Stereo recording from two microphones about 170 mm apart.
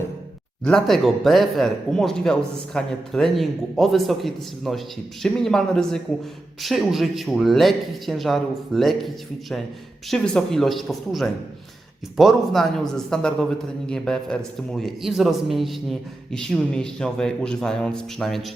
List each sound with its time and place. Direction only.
0.6 s a man's voice: 5° left (ahead or behind)